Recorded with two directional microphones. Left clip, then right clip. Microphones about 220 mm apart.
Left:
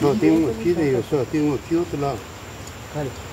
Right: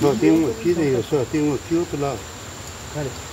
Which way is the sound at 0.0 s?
Centre (ahead or behind).